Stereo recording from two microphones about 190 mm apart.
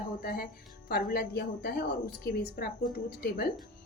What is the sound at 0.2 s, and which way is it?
A woman's voice, 50° left (ahead or behind).